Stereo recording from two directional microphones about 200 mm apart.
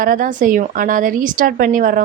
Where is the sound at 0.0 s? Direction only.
45° right (ahead or behind).